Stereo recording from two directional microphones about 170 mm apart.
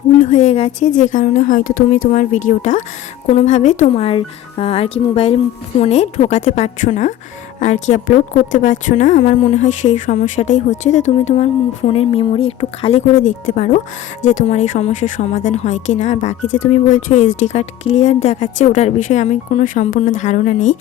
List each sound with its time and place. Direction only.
0.2 s a woman's voice: 45° left (ahead or behind)